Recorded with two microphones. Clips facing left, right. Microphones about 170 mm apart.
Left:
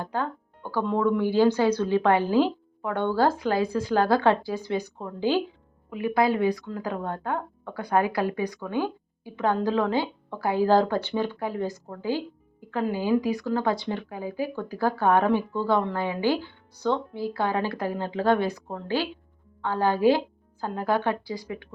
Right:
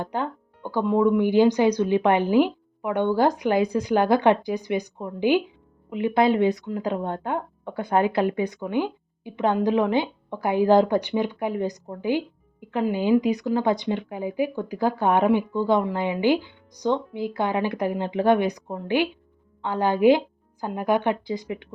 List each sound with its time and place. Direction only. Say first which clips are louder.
0.0 s a woman's voice: right 2 dB; 20° right (ahead or behind)